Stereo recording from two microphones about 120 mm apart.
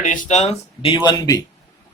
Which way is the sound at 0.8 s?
40° left (ahead or behind).